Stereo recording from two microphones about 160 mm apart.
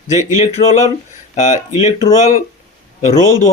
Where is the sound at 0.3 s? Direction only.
45° left (ahead or behind).